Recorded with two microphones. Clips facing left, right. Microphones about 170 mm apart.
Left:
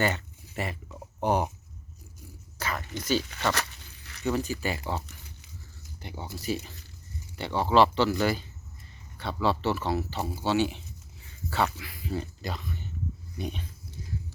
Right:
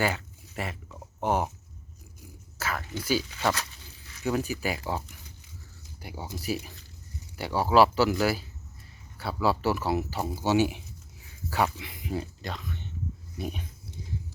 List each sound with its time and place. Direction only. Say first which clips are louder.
0.0 s a sound: left 1 dB; centre (ahead or behind)
1.2 s speech: left 1 dB; centre (ahead or behind)
2.6 s speech: right 1 dB; 5° right (ahead or behind)
3.5 s a sound: left 2 dB; 70° left (ahead or behind)
4.2 s speech: even; 5° right (ahead or behind)
6.0 s speech: right 1 dB; 10° right (ahead or behind)
10.3 s a sound: right 2 dB; 10° right (ahead or behind)
11.8 s speech: even; 20° right (ahead or behind)
12.2 s speech: left 1 dB; centre (ahead or behind)
13.4 s speech: even; 10° right (ahead or behind)